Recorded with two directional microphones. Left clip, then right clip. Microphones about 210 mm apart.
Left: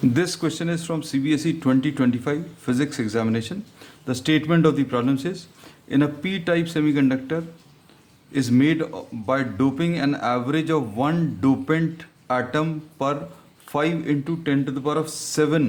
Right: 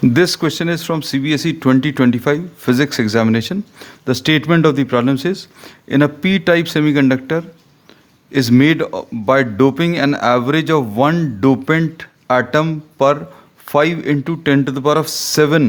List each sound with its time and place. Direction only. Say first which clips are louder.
0.1 s speech: right 9 dB; 40° right (ahead or behind)